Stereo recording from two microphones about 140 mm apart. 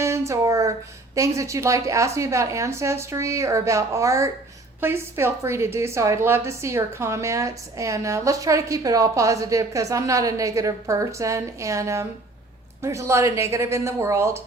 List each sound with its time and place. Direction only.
0.0 s a woman's voice: 20° right (ahead or behind)